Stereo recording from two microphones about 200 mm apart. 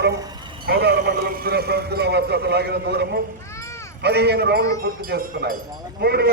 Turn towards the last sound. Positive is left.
turn(degrees=-55)  # may be behind; listen again after turning